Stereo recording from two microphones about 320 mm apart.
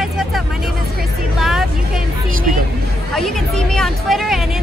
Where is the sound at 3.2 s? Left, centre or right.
Centre.